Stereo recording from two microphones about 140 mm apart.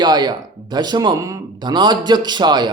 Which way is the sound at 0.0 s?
30° right (ahead or behind).